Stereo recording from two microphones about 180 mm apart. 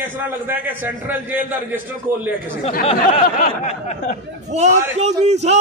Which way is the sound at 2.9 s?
40° left (ahead or behind).